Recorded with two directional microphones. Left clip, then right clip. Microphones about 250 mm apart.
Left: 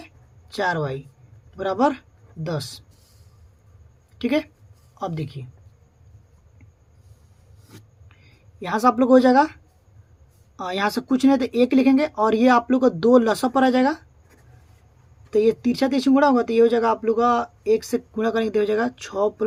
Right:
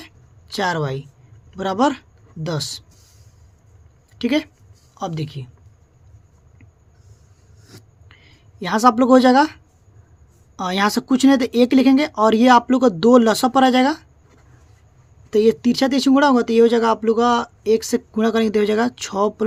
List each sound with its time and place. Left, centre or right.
0.0 s a sound: right
1.5 s speech: right
4.2 s speech: right
8.0 s speech: right
10.6 s speech: right
15.3 s speech: right